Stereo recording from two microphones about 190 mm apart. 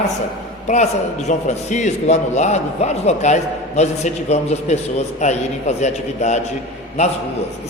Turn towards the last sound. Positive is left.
turn(degrees=35)  # may be behind; listen again after turning